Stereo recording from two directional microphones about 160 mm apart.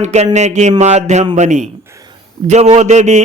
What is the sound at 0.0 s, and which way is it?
A man's voice, 45° right (ahead or behind).